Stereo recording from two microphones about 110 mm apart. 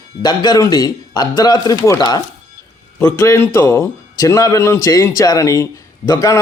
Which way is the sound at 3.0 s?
30° left (ahead or behind).